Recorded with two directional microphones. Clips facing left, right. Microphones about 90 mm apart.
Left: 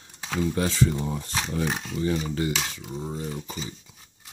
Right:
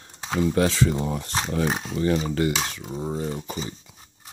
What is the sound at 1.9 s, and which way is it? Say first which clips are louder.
Speech: right 4 dB; 60° right (ahead or behind).